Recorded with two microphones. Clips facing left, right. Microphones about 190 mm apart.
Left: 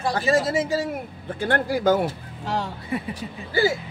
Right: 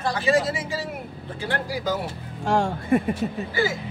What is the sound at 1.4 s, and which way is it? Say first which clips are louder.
Speech: left 6 dB; 55° left (ahead or behind).